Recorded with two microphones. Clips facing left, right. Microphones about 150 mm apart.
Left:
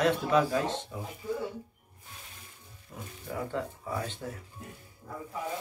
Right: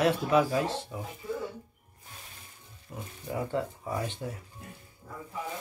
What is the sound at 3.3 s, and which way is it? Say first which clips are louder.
Speech: right 3 dB; 15° right (ahead or behind).